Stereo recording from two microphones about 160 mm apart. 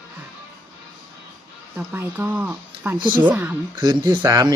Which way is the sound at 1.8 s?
15° right (ahead or behind).